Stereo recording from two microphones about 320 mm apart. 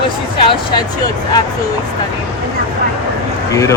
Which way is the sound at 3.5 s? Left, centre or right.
Centre.